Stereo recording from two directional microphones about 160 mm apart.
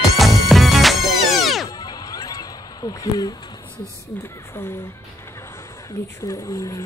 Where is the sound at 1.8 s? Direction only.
25° left (ahead or behind).